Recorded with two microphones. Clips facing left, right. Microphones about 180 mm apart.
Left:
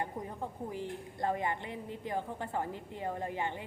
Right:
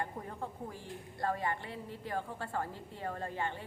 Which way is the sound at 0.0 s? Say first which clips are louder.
Left 2 dB; 15° left (ahead or behind).